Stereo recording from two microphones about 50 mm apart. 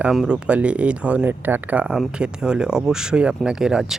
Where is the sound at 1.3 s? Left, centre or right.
Right.